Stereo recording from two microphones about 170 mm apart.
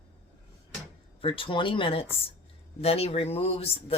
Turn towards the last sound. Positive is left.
turn(degrees=35)  # may be behind; listen again after turning